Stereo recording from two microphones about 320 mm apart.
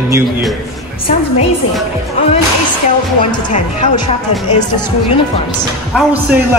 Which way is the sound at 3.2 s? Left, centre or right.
Left.